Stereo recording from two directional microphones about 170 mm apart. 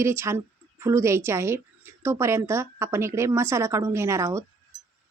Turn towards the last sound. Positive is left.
turn(degrees=-15)  # may be behind; listen again after turning